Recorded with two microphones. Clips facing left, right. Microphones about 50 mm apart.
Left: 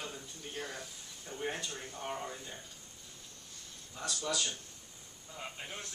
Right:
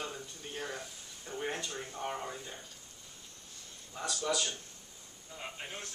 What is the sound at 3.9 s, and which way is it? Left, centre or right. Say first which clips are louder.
Speech: right 3 dB; centre.